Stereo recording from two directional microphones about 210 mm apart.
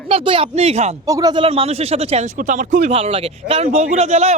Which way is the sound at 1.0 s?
15° right (ahead or behind).